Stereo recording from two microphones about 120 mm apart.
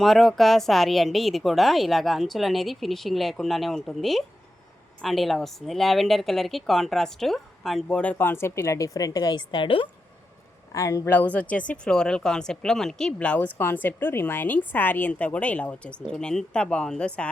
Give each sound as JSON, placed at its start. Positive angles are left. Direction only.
{"t": 0.0, "sound": "a woman's voice", "side_deg": 0}
{"t": 10.8, "sound": "speech", "side_deg": 25}